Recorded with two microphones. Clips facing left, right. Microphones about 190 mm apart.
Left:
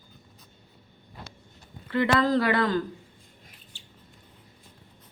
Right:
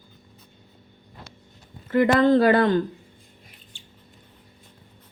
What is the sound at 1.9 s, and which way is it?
Speech, 45° right (ahead or behind).